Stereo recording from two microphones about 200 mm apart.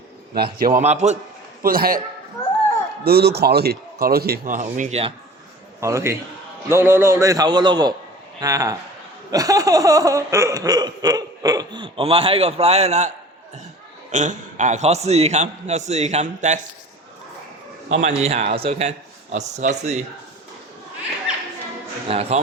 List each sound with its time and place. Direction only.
0.3 s a man's voice: 50° right (ahead or behind)
1.6 s a man's voice: 45° right (ahead or behind)
2.4 s a sound: 15° left (ahead or behind)
3.0 s a man's voice: 50° right (ahead or behind); by 5.1 s 30° right (ahead or behind)
5.8 s a man's voice: 15° right (ahead or behind)
9.3 s a sound: 15° right (ahead or behind); by 13.1 s 35° right (ahead or behind)
14.1 s a man's voice: 35° right (ahead or behind)
18.2 s a man's voice: 30° right (ahead or behind)
22.1 s a man's voice: 30° right (ahead or behind)